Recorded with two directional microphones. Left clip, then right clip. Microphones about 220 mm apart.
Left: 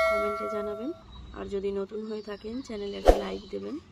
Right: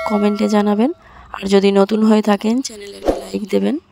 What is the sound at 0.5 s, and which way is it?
Speech, 50° right (ahead or behind).